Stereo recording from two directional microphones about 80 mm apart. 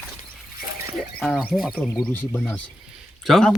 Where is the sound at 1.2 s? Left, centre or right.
Centre.